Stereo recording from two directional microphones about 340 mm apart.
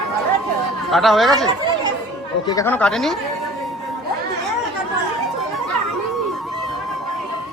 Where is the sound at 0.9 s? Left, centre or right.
Centre.